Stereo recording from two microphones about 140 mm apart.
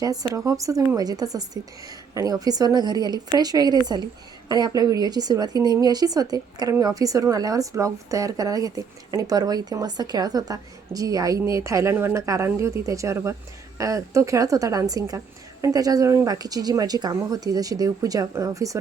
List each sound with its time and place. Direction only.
0.0 s a woman's voice: 25° right (ahead or behind)